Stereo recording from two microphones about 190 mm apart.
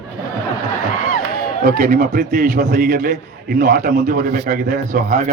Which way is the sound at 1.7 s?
45° right (ahead or behind).